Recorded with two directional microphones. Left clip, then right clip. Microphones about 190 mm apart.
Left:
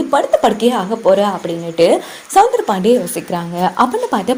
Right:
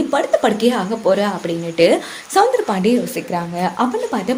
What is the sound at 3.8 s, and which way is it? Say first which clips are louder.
Speech: left 6 dB; 35° left (ahead or behind).